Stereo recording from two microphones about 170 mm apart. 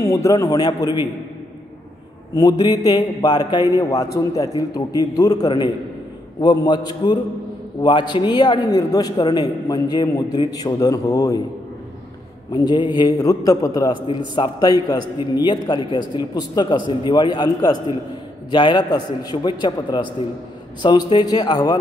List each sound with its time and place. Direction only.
0.0 s a man's voice: 20° left (ahead or behind)
2.3 s a man's voice: 25° left (ahead or behind)
12.5 s a man's voice: 25° left (ahead or behind)